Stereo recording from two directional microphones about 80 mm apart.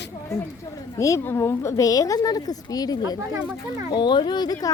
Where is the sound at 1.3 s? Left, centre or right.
Left.